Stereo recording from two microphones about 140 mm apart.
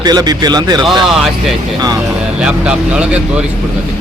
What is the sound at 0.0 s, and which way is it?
Speech, 30° right (ahead or behind).